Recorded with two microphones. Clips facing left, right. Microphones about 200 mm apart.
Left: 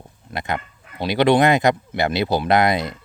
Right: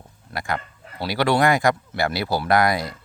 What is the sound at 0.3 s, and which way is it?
Speech, 20° left (ahead or behind).